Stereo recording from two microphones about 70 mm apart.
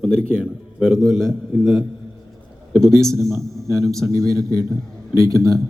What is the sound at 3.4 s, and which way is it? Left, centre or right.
Speech, centre.